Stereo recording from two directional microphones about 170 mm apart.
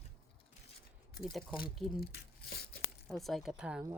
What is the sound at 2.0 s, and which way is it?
Tearing, 65° left (ahead or behind).